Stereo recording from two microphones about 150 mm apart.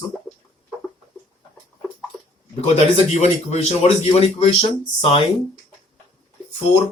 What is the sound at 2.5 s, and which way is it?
A man's voice, 45° left (ahead or behind).